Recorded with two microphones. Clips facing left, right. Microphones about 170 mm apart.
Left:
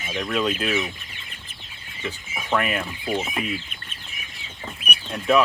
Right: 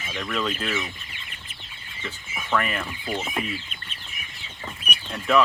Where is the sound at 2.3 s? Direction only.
20° left (ahead or behind).